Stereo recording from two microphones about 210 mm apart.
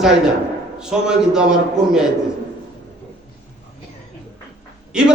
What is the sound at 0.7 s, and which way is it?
Speech, 5° right (ahead or behind).